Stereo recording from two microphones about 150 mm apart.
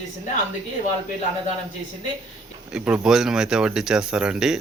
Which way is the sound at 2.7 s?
5° right (ahead or behind).